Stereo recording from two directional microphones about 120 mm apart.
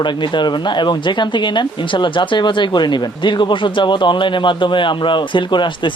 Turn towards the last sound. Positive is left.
turn(degrees=40)  # may be behind; listen again after turning